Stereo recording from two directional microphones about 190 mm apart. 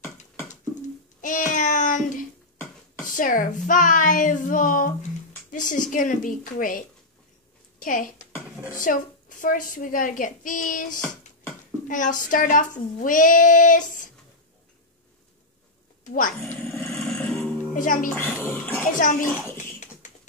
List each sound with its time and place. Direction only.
1.2 s meow: 40° left (ahead or behind)
3.1 s speech: 45° left (ahead or behind)
7.8 s speech: 45° left (ahead or behind)
16.3 s speech: 10° left (ahead or behind)
16.6 s music: 5° left (ahead or behind)
17.7 s speech: 45° left (ahead or behind)
18.1 s speech: 10° left (ahead or behind)
18.9 s speech: 45° left (ahead or behind)
19.5 s a sound: 40° left (ahead or behind)